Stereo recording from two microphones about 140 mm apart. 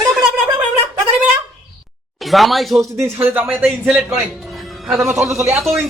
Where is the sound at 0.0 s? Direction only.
30° right (ahead or behind).